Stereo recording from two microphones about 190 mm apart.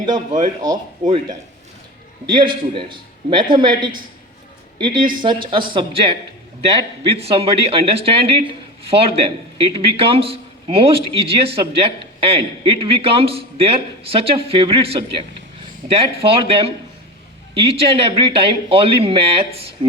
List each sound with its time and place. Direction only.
1.0 s a man's voice: 40° right (ahead or behind)
2.3 s a man's voice: 25° right (ahead or behind)